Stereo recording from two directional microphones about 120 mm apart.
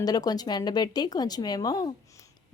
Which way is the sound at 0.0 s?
35° left (ahead or behind).